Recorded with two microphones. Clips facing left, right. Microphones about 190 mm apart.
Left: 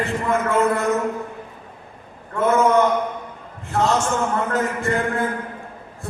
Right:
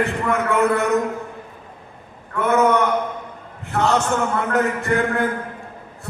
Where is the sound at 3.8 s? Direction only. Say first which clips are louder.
Right 1 dB; 65° right (ahead or behind).